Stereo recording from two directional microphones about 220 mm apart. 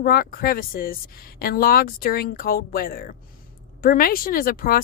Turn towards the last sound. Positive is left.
turn(degrees=40)  # may be behind; listen again after turning